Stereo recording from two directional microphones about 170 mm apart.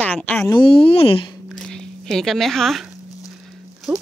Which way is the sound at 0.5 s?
30° left (ahead or behind).